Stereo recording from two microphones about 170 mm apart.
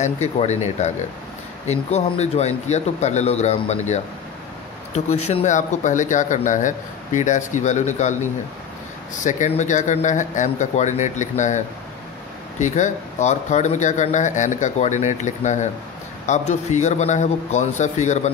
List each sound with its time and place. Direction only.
0.0 s speech: 40° left (ahead or behind)